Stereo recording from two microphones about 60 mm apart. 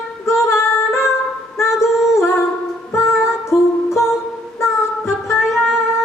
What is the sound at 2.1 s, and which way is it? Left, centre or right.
Humming, left.